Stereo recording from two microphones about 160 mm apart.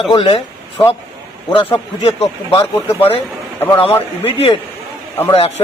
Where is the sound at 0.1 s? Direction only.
35° left (ahead or behind).